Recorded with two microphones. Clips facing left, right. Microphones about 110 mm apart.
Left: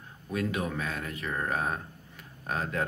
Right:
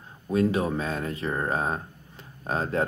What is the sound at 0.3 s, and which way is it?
Speech, 30° right (ahead or behind).